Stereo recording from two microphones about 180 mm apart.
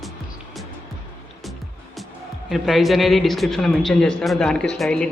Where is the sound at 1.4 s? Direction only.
Centre (ahead or behind).